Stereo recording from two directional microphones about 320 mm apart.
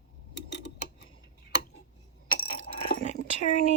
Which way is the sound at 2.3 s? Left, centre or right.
Left.